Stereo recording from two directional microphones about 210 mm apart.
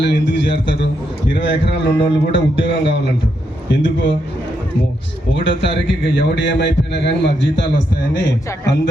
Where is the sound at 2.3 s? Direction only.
60° left (ahead or behind).